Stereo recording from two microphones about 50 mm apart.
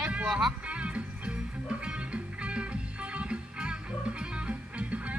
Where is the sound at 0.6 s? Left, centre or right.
Right.